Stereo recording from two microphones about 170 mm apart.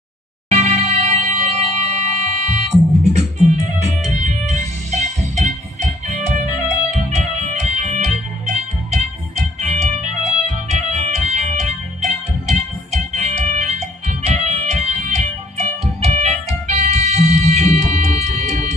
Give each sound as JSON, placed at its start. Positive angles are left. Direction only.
{"t": 0.5, "sound": "music", "side_deg": -40}
{"t": 7.8, "sound": "music", "side_deg": -45}
{"t": 9.6, "sound": "organ", "side_deg": -40}
{"t": 12.0, "sound": "music", "side_deg": -40}